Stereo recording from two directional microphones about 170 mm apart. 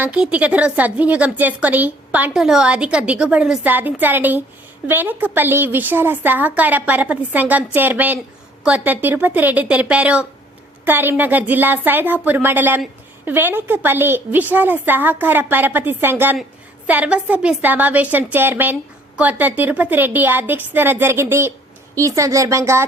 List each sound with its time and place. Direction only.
0.0 s a woman's voice: 10° right (ahead or behind)